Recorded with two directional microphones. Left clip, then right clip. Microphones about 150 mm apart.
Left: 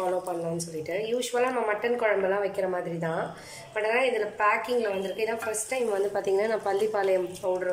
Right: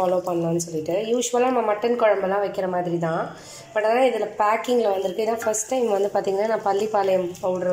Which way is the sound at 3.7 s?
20° right (ahead or behind).